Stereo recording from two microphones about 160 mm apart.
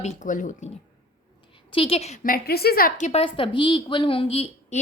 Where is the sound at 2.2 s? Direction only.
70° left (ahead or behind).